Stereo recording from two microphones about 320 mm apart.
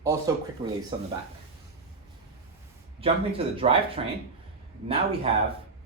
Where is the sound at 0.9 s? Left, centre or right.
Centre.